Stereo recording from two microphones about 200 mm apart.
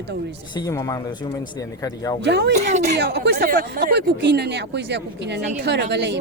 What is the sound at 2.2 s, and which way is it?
Speech, 60° right (ahead or behind).